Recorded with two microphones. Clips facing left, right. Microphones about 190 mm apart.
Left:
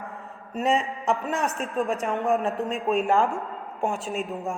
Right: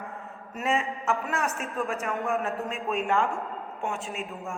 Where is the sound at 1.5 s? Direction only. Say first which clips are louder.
Left 4 dB; 35° left (ahead or behind).